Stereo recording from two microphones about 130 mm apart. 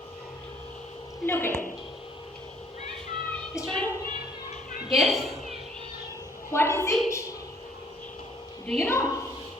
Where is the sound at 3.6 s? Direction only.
25° left (ahead or behind).